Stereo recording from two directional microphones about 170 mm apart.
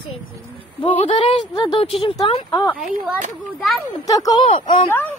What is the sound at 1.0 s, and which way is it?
Speech, 40° left (ahead or behind).